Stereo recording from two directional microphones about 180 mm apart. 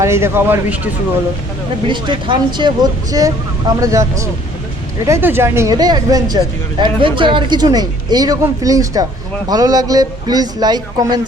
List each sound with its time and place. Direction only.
0.0 s speech: 15° right (ahead or behind)
1.9 s speech: 25° right (ahead or behind)